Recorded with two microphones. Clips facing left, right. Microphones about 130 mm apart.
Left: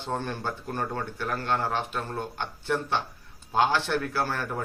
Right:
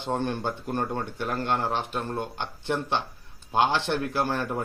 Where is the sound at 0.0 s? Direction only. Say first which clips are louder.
Right 3 dB; 20° right (ahead or behind).